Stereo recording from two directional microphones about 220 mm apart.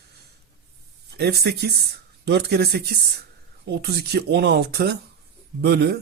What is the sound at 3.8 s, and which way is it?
Speech, 50° right (ahead or behind).